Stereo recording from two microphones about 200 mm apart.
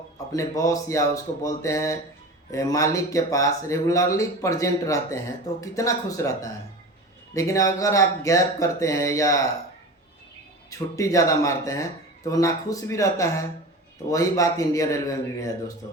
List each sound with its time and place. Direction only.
0.3 s speech: 15° left (ahead or behind)
10.7 s speech: 15° left (ahead or behind)